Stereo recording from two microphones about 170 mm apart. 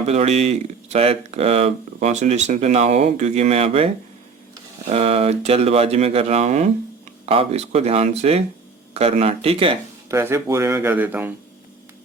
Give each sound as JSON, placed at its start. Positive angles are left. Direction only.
{"t": 0.1, "sound": "speech", "side_deg": -40}
{"t": 4.9, "sound": "speech", "side_deg": -35}
{"t": 10.1, "sound": "a man's voice", "side_deg": -15}